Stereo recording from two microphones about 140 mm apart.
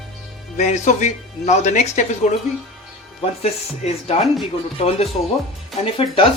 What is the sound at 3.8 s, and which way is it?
Speech, 50° left (ahead or behind).